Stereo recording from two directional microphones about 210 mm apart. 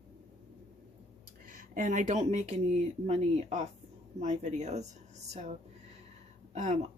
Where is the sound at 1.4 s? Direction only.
40° right (ahead or behind).